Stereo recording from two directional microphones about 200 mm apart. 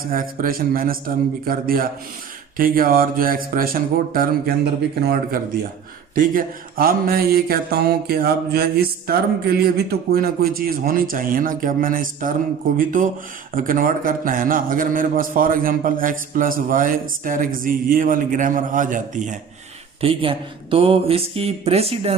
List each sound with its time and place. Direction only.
0.0 s a sound: 45° right (ahead or behind)
17.6 s a man's voice: 45° right (ahead or behind)
20.0 s speech: 25° right (ahead or behind)